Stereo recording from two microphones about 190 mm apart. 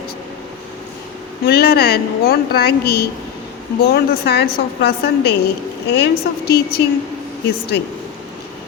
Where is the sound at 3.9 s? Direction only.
60° left (ahead or behind).